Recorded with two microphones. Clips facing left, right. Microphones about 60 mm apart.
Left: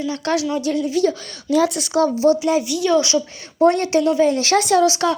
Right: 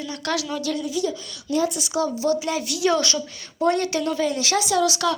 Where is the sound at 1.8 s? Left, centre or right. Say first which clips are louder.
Left 6 dB; left.